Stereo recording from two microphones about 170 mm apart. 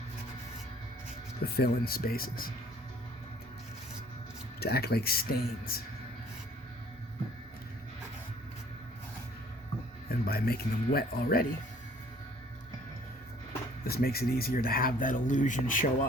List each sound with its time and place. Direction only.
1.5 s speech: 65° left (ahead or behind)
4.6 s speech: 65° left (ahead or behind)
10.1 s speech: 65° left (ahead or behind)
13.8 s speech: 65° left (ahead or behind)